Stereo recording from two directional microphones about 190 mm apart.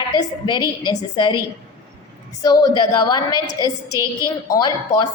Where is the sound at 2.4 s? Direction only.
20° left (ahead or behind).